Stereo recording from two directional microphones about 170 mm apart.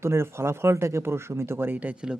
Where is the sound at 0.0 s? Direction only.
15° right (ahead or behind).